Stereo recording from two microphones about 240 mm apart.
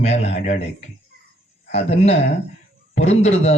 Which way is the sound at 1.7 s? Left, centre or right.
Left.